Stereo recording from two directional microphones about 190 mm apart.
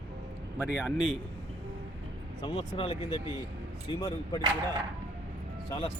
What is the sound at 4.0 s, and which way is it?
Speech, 15° left (ahead or behind).